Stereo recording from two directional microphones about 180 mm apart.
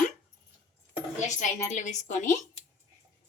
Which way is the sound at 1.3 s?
45° left (ahead or behind).